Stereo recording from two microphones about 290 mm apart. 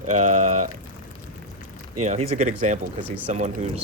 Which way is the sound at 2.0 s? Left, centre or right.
Right.